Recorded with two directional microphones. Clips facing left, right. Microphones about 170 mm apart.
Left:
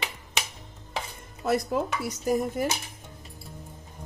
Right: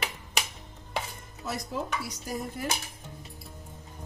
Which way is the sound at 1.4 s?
60° left (ahead or behind).